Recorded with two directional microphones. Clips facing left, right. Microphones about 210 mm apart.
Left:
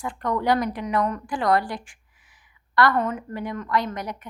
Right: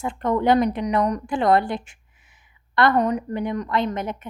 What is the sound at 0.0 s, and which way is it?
A woman's voice, 25° right (ahead or behind).